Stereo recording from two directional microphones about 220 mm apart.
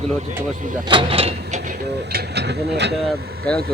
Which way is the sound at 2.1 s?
50° right (ahead or behind).